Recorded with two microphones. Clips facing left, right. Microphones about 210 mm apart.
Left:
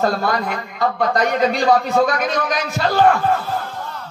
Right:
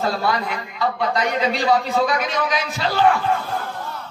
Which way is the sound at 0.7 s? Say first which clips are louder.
Left 3 dB; 50° left (ahead or behind).